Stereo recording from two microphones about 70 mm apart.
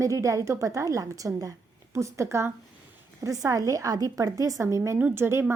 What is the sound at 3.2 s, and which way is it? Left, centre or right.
A woman's voice, right.